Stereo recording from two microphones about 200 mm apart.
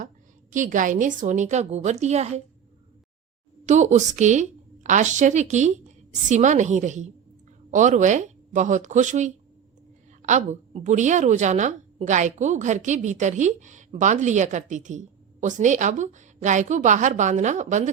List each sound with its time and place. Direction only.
0.5 s a woman's voice: 40° right (ahead or behind)
3.7 s a woman's voice: 35° right (ahead or behind)